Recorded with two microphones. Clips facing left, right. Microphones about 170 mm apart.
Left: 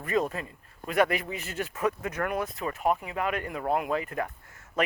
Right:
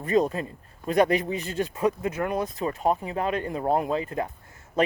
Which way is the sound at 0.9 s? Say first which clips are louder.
Right 4 dB; 20° right (ahead or behind).